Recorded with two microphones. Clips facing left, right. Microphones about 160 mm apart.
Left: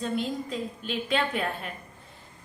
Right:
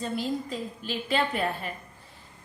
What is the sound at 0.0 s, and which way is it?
A woman's voice, centre (ahead or behind).